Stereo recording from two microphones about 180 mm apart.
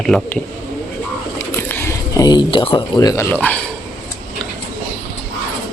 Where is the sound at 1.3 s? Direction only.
10° left (ahead or behind).